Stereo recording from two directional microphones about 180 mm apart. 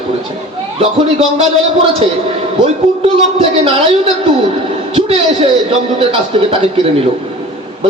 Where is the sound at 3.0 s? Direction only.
30° right (ahead or behind).